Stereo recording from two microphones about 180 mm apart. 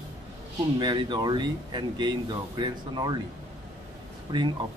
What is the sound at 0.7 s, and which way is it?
Speech, 25° right (ahead or behind).